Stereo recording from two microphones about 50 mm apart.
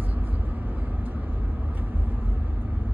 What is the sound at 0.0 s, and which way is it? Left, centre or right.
Vehicle, right.